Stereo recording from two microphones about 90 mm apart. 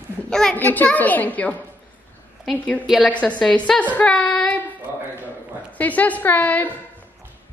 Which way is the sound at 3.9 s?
10° left (ahead or behind).